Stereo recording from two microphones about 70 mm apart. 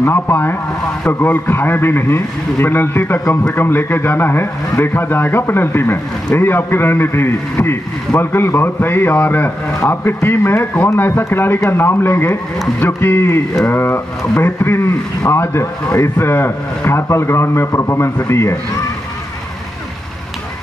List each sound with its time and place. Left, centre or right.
0.0 s speech: left